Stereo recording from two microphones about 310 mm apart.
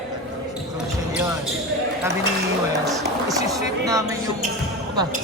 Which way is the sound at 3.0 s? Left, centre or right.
Centre.